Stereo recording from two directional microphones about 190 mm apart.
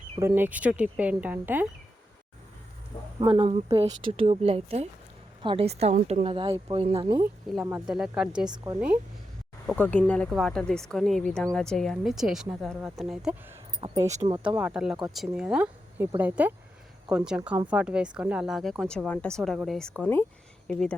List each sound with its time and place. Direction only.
0.2 s speech: 10° right (ahead or behind)
3.2 s a woman's voice: 25° right (ahead or behind)
7.5 s speech: 5° right (ahead or behind)
8.4 s a woman's voice: 20° right (ahead or behind)
9.6 s speech: 5° left (ahead or behind)
13.8 s a woman's voice: 20° right (ahead or behind)
14.4 s speech: 5° right (ahead or behind)
20.0 s speech: 10° left (ahead or behind)